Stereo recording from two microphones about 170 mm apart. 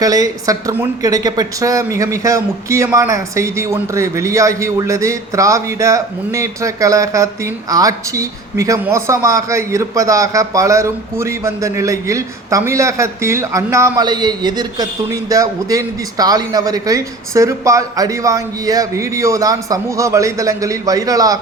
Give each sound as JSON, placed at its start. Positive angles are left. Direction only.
{"t": 0.0, "sound": "speech", "side_deg": -20}